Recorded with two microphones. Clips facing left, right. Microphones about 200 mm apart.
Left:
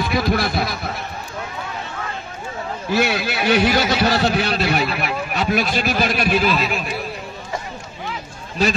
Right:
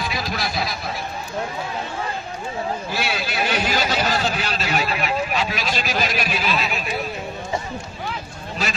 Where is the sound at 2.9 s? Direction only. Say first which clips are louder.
Left 9 dB; 60° left (ahead or behind).